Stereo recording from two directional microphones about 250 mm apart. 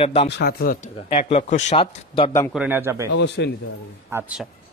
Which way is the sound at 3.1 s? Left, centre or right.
Left.